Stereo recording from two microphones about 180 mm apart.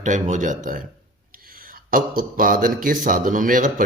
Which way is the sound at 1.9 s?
50° right (ahead or behind).